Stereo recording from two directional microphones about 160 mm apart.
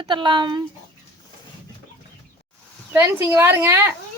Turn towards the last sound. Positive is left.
turn(degrees=-15)  # may be behind; listen again after turning